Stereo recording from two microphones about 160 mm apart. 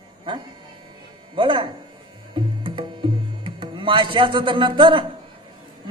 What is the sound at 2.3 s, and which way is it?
Music, 30° right (ahead or behind).